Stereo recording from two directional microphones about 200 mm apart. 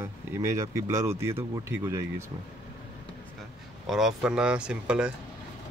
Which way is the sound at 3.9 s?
Centre (ahead or behind).